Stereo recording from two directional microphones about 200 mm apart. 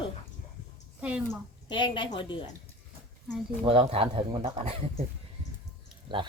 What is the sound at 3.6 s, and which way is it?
Speech, 25° right (ahead or behind).